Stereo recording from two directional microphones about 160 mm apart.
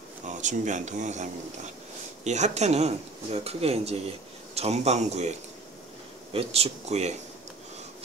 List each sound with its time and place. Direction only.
0.3 s speech: 50° right (ahead or behind)
6.3 s speech: 40° right (ahead or behind)